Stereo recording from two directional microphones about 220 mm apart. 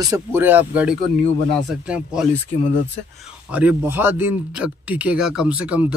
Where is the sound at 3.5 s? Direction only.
5° right (ahead or behind).